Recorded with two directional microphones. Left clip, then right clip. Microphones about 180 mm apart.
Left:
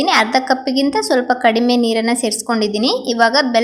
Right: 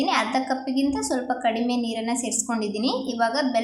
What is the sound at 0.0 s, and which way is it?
A woman's voice, 30° left (ahead or behind).